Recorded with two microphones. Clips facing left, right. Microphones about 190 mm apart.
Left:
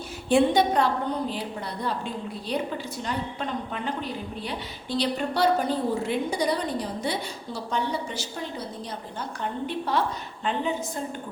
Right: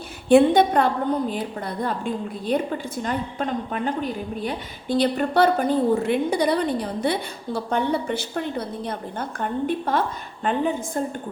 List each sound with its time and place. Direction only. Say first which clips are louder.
0.3 s a woman's voice: right 5 dB; 55° right (ahead or behind)